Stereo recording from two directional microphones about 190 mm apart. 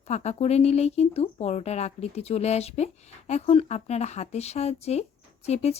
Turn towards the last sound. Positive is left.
turn(degrees=35)  # may be behind; listen again after turning